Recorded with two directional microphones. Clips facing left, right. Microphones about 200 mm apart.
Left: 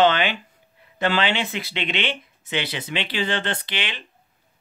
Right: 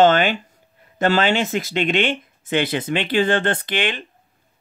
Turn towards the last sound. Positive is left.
turn(degrees=-50)  # may be behind; listen again after turning